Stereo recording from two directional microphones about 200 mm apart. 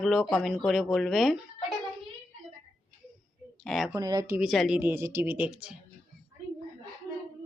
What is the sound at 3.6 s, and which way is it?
Speech, centre (ahead or behind).